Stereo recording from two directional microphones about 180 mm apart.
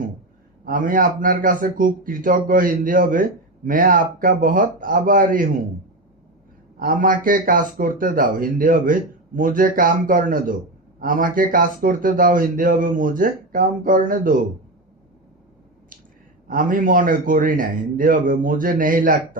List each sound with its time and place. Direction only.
0.6 s a man's voice: 50° right (ahead or behind)
6.7 s a man's voice: 50° right (ahead or behind)
16.5 s a man's voice: 50° right (ahead or behind)